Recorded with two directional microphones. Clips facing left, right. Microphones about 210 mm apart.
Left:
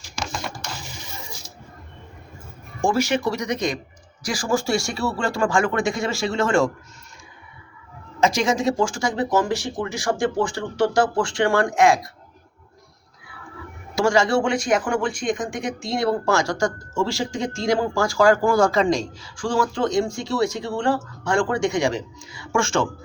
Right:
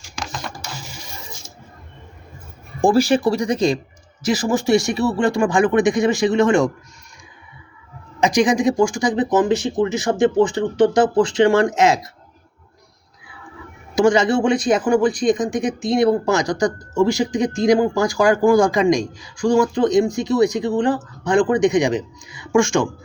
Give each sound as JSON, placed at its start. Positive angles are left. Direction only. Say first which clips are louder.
{"t": 0.2, "sound": "computer keyboard", "louder": "even", "side_deg": 0}
{"t": 2.8, "sound": "speech", "louder": "right 6 dB", "side_deg": -35}
{"t": 8.2, "sound": "speech", "louder": "right 4 dB", "side_deg": -15}
{"t": 13.9, "sound": "speech", "louder": "right 4 dB", "side_deg": -20}